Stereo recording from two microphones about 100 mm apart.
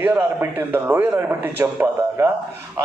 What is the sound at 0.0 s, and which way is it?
A man's voice, 20° right (ahead or behind).